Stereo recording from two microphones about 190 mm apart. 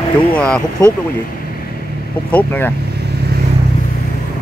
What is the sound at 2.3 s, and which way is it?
Speech, 10° left (ahead or behind).